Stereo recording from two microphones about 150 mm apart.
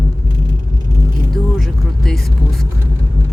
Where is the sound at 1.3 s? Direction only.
5° left (ahead or behind).